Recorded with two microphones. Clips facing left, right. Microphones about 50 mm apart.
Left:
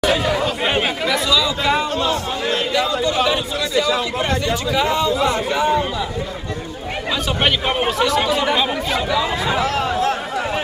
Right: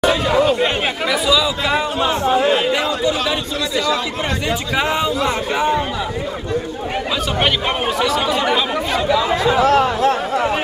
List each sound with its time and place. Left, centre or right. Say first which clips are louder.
0.6 s chatter: right 1 dB; centre
1.0 s chatter: right 4 dB; centre
2.0 s chatter: right 5 dB; right
2.7 s a sound: right 1 dB; centre
4.5 s speech: right 2 dB; centre
7.4 s speech: left 2 dB; centre
9.6 s speech: right 6 dB; right